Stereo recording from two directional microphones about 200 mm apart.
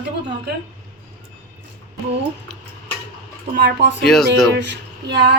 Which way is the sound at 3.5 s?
55° right (ahead or behind).